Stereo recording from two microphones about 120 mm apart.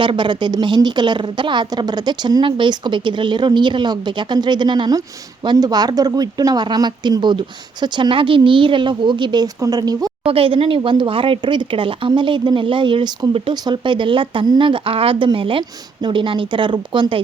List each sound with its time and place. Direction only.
0.0 s a woman's voice: 40° right (ahead or behind)
10.2 s speech: 50° right (ahead or behind)